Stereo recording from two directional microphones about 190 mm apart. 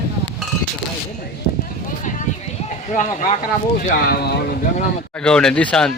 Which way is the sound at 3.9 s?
50° left (ahead or behind).